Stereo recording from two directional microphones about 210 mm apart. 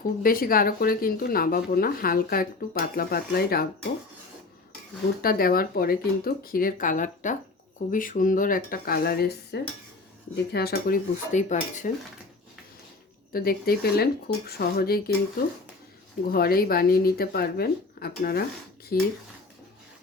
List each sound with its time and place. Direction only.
0.2 s speech: 45° left (ahead or behind)
5.2 s speech: 45° left (ahead or behind)
13.3 s speech: 45° left (ahead or behind)
16.3 s speech: 45° left (ahead or behind)